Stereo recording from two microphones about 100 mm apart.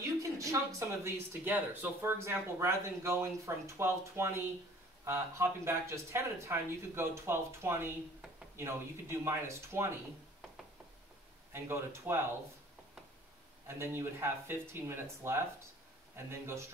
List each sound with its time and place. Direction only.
0.0 s speech: 30° right (ahead or behind)
11.5 s speech: 25° right (ahead or behind)
13.7 s speech: 25° right (ahead or behind)